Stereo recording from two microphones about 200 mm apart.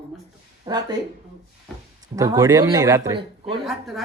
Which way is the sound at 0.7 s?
20° right (ahead or behind).